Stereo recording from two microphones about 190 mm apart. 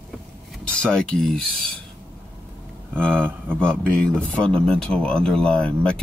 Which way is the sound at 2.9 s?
5° left (ahead or behind).